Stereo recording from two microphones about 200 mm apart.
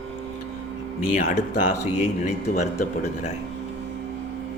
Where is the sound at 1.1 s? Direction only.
40° left (ahead or behind).